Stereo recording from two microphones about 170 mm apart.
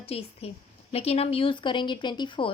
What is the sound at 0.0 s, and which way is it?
A woman's voice, 35° left (ahead or behind).